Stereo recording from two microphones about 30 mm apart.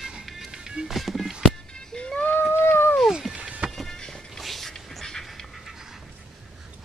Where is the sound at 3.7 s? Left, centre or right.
Centre.